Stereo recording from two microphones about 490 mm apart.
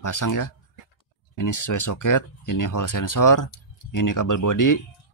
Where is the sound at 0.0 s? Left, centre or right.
Left.